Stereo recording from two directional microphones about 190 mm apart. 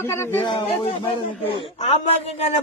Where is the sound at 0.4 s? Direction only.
25° left (ahead or behind).